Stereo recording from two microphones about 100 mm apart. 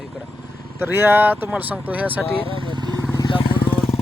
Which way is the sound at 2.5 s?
55° right (ahead or behind).